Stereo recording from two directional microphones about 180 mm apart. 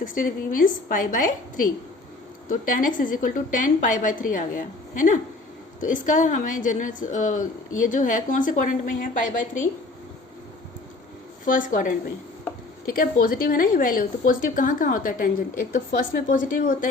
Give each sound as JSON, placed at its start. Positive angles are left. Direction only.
{"t": 0.0, "sound": "a woman's voice", "side_deg": 50}
{"t": 11.4, "sound": "a woman's voice", "side_deg": 50}